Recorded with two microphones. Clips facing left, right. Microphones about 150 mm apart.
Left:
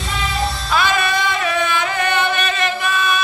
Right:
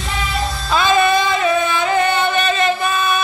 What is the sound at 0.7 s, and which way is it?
Music, 25° right (ahead or behind).